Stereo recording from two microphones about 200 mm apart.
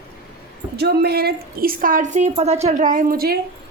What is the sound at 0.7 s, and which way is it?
A woman's voice, 55° right (ahead or behind).